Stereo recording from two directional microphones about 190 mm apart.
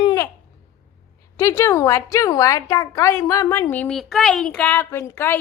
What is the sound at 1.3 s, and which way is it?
A woman's voice, 15° left (ahead or behind).